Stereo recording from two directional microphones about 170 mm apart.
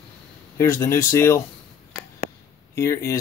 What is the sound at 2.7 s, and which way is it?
Speech, 15° left (ahead or behind).